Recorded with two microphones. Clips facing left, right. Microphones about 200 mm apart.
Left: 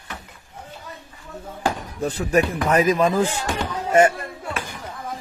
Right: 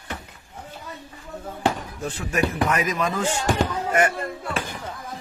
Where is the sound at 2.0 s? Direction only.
35° left (ahead or behind).